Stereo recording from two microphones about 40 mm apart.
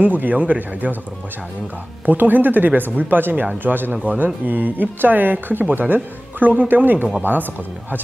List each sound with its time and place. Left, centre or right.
0.0 s speech: right
2.0 s speech: right
3.9 s speech: right